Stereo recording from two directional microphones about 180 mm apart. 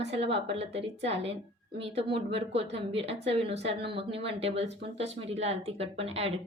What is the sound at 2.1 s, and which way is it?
Speech, 35° right (ahead or behind).